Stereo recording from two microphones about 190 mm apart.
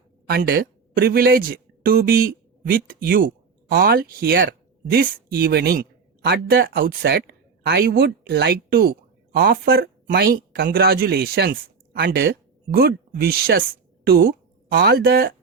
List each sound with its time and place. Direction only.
0.3 s speech: 55° right (ahead or behind)